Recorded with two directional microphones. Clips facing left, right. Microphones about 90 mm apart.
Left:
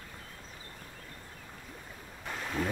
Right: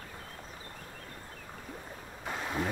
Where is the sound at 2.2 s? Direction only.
20° right (ahead or behind).